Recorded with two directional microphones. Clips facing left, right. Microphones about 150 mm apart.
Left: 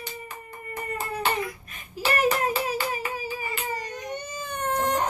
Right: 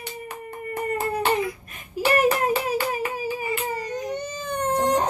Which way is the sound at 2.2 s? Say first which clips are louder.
Even; 55° right (ahead or behind).